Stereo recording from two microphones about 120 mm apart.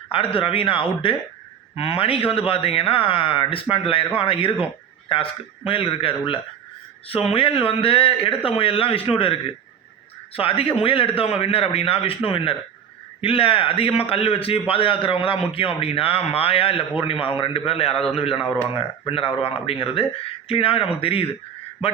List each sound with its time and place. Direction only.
0.1 s a man's voice: 50° left (ahead or behind)